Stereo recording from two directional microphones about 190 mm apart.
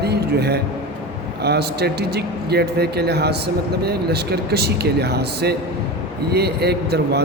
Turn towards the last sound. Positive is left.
turn(degrees=-60)  # may be behind; listen again after turning